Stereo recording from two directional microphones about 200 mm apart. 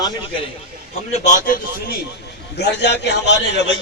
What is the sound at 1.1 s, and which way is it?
Speech, 35° left (ahead or behind).